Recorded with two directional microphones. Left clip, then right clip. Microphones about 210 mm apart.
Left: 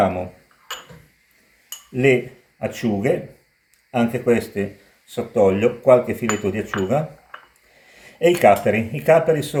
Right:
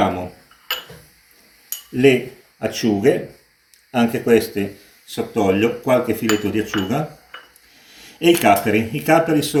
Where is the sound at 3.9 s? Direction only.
50° left (ahead or behind).